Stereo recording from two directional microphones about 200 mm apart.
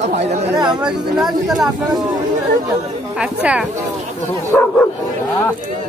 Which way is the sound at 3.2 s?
5° right (ahead or behind).